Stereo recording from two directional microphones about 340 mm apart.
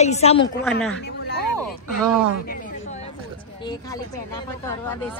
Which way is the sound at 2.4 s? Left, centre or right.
Left.